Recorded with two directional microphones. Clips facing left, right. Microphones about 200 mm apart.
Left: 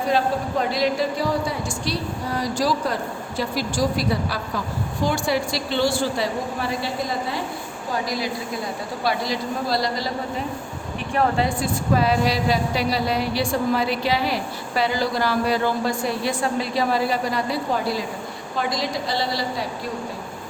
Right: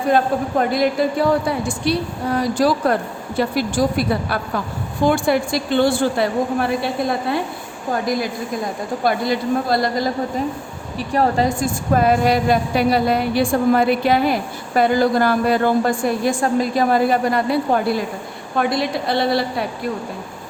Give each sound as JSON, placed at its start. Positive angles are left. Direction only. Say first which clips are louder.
{"t": 0.6, "sound": "a woman's voice", "louder": "right 4 dB", "side_deg": -55}
{"t": 10.9, "sound": "a woman's voice", "louder": "right 4 dB", "side_deg": -35}